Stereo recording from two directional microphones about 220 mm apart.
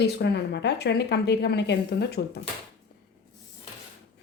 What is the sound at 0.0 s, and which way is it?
A woman's voice, 50° left (ahead or behind).